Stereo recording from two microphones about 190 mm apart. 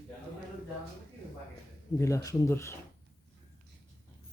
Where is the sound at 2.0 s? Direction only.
15° left (ahead or behind).